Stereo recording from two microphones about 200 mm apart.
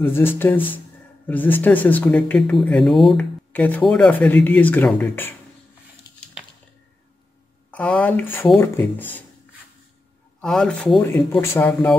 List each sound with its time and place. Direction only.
0.0 s speech: 10° left (ahead or behind)
6.0 s a sound: 20° left (ahead or behind)
7.7 s speech: 5° left (ahead or behind)
10.4 s speech: 5° left (ahead or behind)